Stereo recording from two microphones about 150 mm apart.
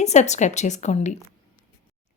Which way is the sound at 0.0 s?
50° left (ahead or behind).